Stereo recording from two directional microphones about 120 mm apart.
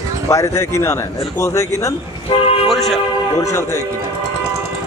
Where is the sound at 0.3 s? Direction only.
25° left (ahead or behind).